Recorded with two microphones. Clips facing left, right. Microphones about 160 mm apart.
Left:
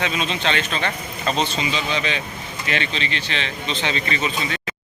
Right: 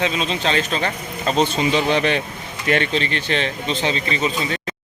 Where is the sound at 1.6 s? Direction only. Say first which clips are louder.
Right 6 dB; 55° right (ahead or behind); by 4.1 s 35° right (ahead or behind).